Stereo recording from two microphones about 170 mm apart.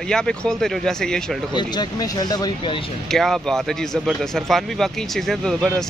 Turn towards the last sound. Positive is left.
turn(degrees=0)  # may be behind; listen again after turning